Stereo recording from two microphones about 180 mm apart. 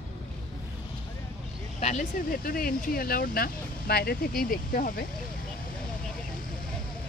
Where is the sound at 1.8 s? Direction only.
40° left (ahead or behind).